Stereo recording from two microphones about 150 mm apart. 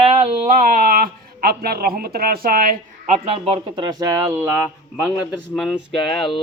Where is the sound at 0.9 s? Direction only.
75° right (ahead or behind).